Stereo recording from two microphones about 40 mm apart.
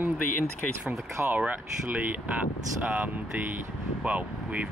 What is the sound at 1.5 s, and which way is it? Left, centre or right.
Speech, right.